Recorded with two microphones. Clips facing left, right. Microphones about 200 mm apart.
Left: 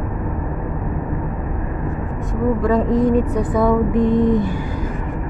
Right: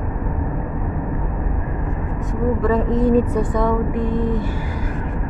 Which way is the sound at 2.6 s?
Centre (ahead or behind).